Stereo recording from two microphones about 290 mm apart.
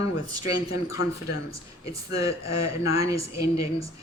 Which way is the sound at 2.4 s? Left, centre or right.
Left.